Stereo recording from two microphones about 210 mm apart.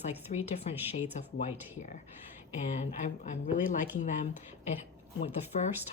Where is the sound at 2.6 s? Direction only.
35° left (ahead or behind).